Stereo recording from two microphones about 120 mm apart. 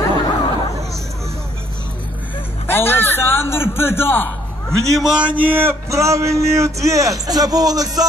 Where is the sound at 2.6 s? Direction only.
20° left (ahead or behind).